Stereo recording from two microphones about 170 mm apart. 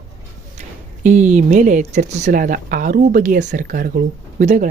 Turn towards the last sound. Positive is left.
turn(degrees=-45)  # may be behind; listen again after turning